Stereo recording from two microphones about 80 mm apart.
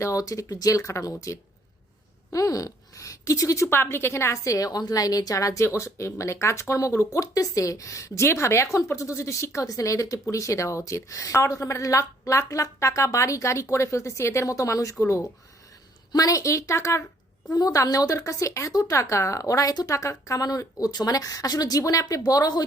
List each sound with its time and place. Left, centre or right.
0.0 s a woman's voice: left
2.3 s a woman's voice: left
3.7 s a woman's voice: left
16.1 s a woman's voice: left
17.5 s a woman's voice: left